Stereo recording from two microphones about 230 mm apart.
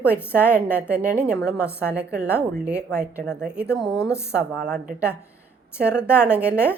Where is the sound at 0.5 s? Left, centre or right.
Centre.